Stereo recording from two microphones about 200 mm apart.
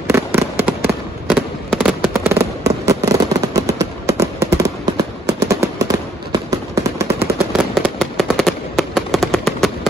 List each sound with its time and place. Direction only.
0.1 s fireworks: 10° right (ahead or behind)
2.1 s fireworks: 15° right (ahead or behind)
7.5 s fireworks: 5° right (ahead or behind)